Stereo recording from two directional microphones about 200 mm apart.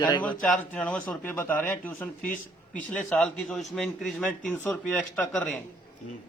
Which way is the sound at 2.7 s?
5° left (ahead or behind).